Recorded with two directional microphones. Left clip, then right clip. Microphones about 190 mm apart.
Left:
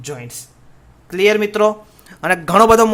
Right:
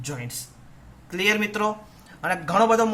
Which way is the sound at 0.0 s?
35° left (ahead or behind).